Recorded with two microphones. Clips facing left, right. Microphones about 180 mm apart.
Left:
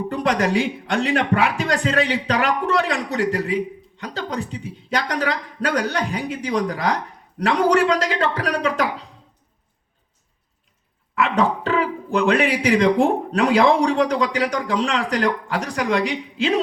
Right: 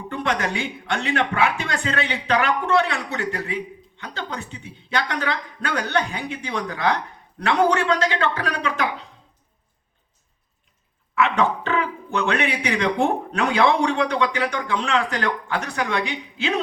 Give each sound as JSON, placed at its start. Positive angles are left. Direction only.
{"t": 0.1, "sound": "speech", "side_deg": 35}
{"t": 11.3, "sound": "speech", "side_deg": 35}